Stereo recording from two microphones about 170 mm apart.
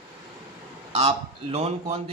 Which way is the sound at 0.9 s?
40° right (ahead or behind).